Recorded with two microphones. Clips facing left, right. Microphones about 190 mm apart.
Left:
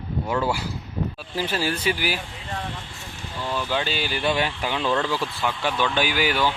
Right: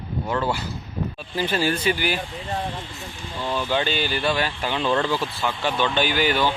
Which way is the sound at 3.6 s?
Centre (ahead or behind).